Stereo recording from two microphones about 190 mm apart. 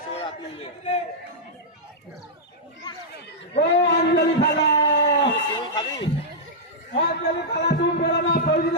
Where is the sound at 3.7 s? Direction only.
65° left (ahead or behind).